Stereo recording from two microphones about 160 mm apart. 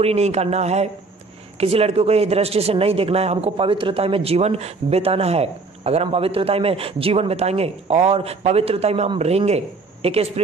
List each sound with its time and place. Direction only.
0.0 s speech: 40° right (ahead or behind)